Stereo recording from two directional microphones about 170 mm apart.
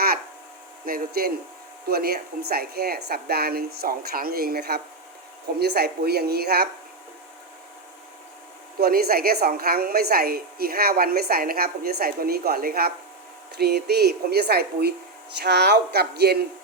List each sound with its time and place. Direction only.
0.9 s a woman's voice: 60° right (ahead or behind)
8.8 s a woman's voice: 65° right (ahead or behind)